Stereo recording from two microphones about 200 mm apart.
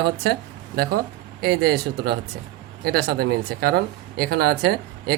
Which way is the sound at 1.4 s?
50° right (ahead or behind).